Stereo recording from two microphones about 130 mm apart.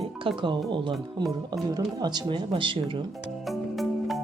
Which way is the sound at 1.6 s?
30° right (ahead or behind).